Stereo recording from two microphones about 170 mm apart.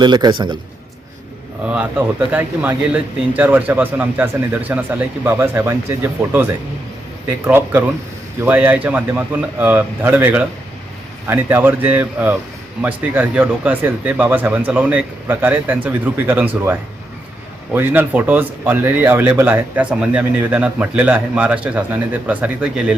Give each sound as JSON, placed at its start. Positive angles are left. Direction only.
{"t": 0.0, "sound": "a man's voice", "side_deg": -25}
{"t": 1.6, "sound": "speech", "side_deg": -5}
{"t": 17.7, "sound": "speech", "side_deg": -10}